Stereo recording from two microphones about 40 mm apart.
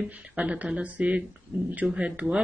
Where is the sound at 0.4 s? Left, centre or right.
Right.